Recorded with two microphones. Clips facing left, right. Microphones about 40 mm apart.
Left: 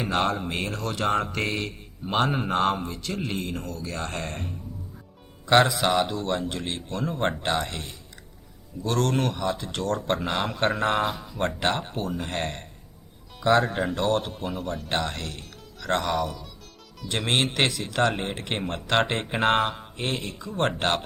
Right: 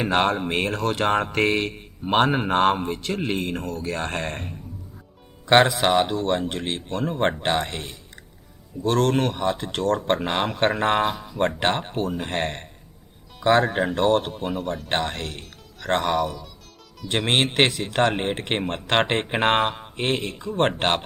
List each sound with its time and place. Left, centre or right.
0.0 s a man's voice: right
14.3 s speech: centre
14.8 s a man's voice: right
15.4 s music: right
17.1 s a man's voice: right
19.6 s speech: centre
20.0 s a man's voice: right